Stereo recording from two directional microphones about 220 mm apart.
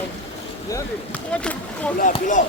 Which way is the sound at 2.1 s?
35° left (ahead or behind).